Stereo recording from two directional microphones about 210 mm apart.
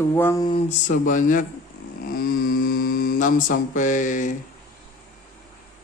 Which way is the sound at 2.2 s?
45° left (ahead or behind).